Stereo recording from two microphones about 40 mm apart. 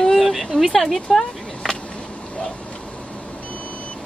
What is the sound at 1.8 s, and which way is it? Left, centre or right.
Vehicle, left.